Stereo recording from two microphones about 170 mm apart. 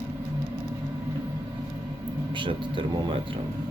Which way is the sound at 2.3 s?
30° right (ahead or behind).